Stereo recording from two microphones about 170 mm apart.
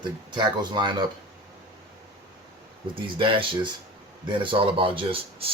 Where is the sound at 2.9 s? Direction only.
30° right (ahead or behind).